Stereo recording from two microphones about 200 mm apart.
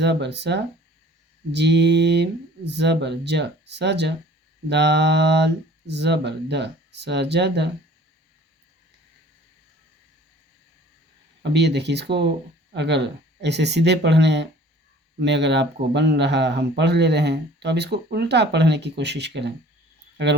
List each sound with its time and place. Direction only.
0.0 s speech: 60° right (ahead or behind)
11.5 s speech: 60° right (ahead or behind)